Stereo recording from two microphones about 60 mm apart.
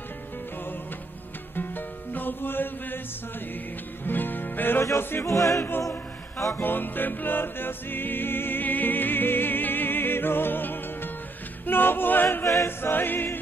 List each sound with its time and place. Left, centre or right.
2.1 s chant: left
4.0 s music: left
4.9 s music: left
6.5 s music: left
11.6 s choir: left